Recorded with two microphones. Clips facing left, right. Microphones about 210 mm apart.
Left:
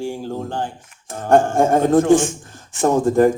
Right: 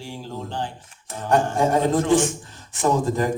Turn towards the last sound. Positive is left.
turn(degrees=50)  # may be behind; listen again after turning